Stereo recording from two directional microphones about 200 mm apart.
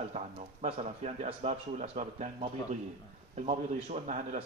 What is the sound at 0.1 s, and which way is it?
Speech, 30° right (ahead or behind).